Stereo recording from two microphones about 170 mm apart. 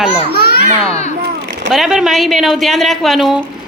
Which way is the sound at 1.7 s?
Centre (ahead or behind).